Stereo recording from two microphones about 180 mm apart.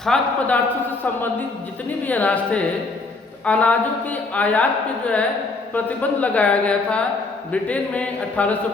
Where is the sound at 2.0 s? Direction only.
10° left (ahead or behind).